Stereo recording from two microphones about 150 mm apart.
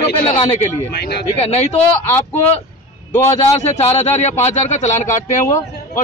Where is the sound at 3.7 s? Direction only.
45° left (ahead or behind).